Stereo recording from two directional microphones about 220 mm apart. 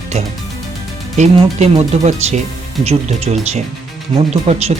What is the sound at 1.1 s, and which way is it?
Speech, 30° right (ahead or behind).